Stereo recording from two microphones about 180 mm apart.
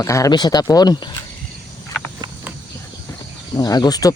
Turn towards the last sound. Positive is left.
turn(degrees=20)  # may be behind; listen again after turning